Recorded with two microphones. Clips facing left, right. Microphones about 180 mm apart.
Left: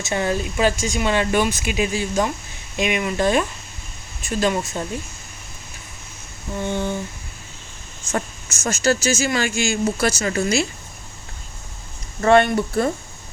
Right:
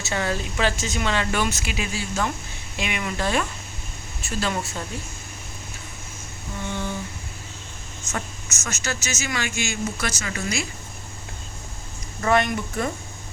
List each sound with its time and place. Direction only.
0.0 s speech: 20° left (ahead or behind)
6.7 s a sound: 30° left (ahead or behind)
8.1 s speech: 30° left (ahead or behind)
12.2 s speech: 30° left (ahead or behind)